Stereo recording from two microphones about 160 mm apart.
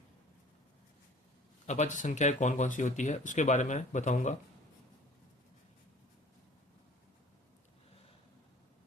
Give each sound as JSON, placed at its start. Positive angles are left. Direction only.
{"t": 1.6, "sound": "speech", "side_deg": 45}